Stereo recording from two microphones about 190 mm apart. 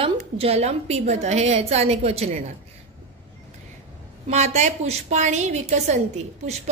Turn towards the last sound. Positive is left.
turn(degrees=-35)  # may be behind; listen again after turning